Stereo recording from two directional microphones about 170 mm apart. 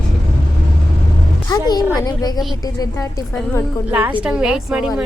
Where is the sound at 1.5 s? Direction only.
25° left (ahead or behind).